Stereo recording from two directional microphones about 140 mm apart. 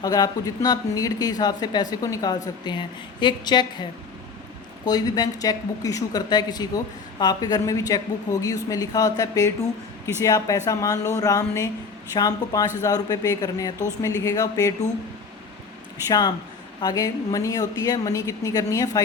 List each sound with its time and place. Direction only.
0.0 s a woman's voice: 25° left (ahead or behind)
4.9 s a woman's voice: 25° left (ahead or behind)
16.0 s a woman's voice: 30° left (ahead or behind)